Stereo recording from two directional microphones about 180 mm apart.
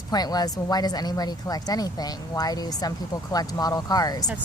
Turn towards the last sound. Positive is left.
turn(degrees=20)  # may be behind; listen again after turning